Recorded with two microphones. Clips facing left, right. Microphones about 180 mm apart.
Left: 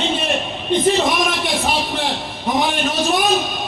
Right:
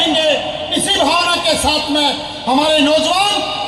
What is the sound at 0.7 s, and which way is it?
A man's voice, 90° right.